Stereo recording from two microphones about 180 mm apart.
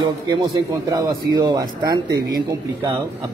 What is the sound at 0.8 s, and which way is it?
A man's voice, 20° right (ahead or behind).